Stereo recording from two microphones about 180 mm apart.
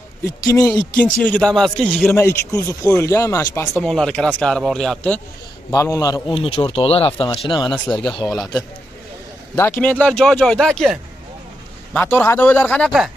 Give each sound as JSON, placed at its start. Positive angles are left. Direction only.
{"t": 0.4, "sound": "a man's voice", "side_deg": 20}
{"t": 0.7, "sound": "speech", "side_deg": 5}
{"t": 2.1, "sound": "speech", "side_deg": 15}
{"t": 3.8, "sound": "speech", "side_deg": 5}
{"t": 5.7, "sound": "a man's voice", "side_deg": 20}
{"t": 7.8, "sound": "speech", "side_deg": 5}
{"t": 9.6, "sound": "speech", "side_deg": 10}